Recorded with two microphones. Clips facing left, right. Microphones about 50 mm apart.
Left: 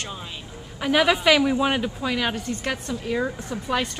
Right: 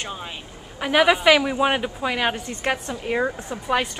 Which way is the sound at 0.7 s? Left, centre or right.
Centre.